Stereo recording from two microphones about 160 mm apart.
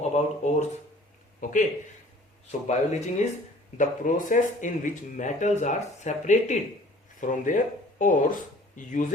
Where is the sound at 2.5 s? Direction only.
45° left (ahead or behind).